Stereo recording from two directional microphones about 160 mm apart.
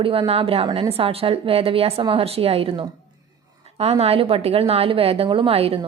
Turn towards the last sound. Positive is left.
turn(degrees=-35)  # may be behind; listen again after turning